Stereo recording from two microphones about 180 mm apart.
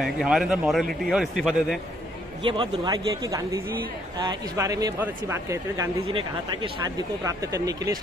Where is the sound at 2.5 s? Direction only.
25° right (ahead or behind).